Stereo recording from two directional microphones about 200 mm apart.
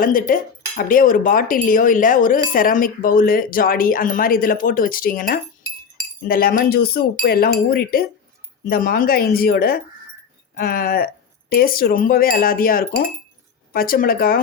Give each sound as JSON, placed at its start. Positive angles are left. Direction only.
{"t": 0.0, "sound": "speech", "side_deg": 45}